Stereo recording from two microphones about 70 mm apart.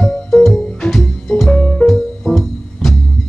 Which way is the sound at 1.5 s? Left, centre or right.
Centre.